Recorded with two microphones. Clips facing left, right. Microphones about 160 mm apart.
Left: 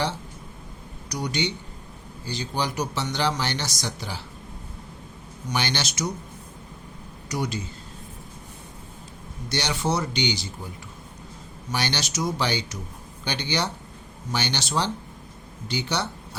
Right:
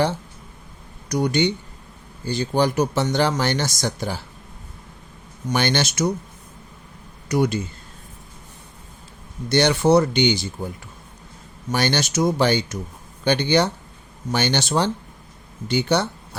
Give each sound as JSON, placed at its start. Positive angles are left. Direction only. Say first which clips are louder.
{"t": 1.1, "sound": "speech", "louder": "right 8 dB", "side_deg": -55}
{"t": 5.5, "sound": "speech", "louder": "right 7 dB", "side_deg": -50}
{"t": 7.3, "sound": "speech", "louder": "right 8 dB", "side_deg": -55}
{"t": 9.5, "sound": "speech", "louder": "right 10 dB", "side_deg": -55}
{"t": 11.7, "sound": "speech", "louder": "right 7 dB", "side_deg": -50}